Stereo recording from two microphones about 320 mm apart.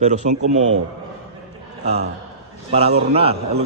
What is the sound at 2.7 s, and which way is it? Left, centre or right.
Speech, centre.